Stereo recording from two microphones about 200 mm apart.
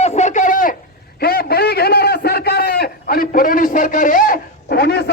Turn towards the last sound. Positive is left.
turn(degrees=55)  # may be behind; listen again after turning